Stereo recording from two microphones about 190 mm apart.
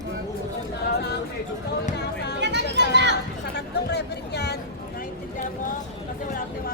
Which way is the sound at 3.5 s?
60° left (ahead or behind).